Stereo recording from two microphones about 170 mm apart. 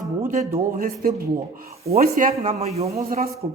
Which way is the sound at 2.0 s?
55° right (ahead or behind).